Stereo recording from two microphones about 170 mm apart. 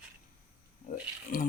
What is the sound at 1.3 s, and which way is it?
Speech, 60° left (ahead or behind).